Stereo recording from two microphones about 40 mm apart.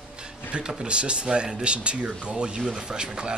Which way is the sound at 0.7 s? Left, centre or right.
Right.